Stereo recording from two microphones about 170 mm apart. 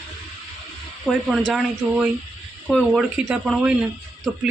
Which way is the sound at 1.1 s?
Centre (ahead or behind).